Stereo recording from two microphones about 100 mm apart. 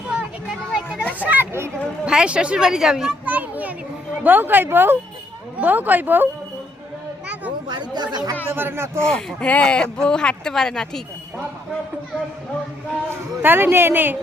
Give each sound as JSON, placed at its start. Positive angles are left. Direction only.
{"t": 0.7, "sound": "children playing", "side_deg": -5}
{"t": 1.2, "sound": "speech", "side_deg": -20}
{"t": 2.0, "sound": "speech", "side_deg": -10}
{"t": 3.2, "sound": "a child's voice", "side_deg": -15}
{"t": 7.7, "sound": "speech", "side_deg": -45}
{"t": 8.4, "sound": "speech", "side_deg": -20}
{"t": 9.0, "sound": "speech", "side_deg": 10}
{"t": 13.4, "sound": "speech", "side_deg": -20}